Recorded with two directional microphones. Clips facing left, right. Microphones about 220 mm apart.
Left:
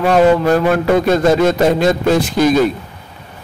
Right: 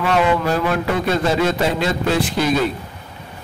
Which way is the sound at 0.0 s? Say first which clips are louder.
Left 7 dB; 40° left (ahead or behind).